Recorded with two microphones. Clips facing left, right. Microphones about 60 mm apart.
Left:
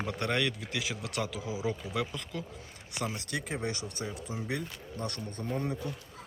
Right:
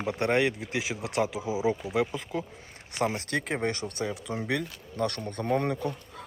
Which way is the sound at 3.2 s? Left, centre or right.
Right.